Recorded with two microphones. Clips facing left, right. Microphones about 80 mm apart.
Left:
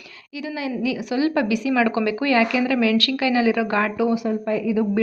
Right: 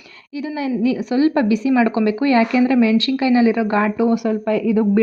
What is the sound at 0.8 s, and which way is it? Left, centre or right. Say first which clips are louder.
A woman's voice: right 6 dB; right.